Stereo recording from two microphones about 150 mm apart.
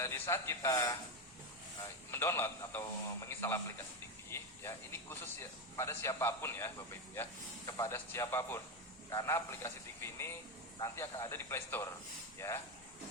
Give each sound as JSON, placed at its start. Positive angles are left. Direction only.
{"t": 0.0, "sound": "a man's voice", "side_deg": 20}
{"t": 2.0, "sound": "speech", "side_deg": 15}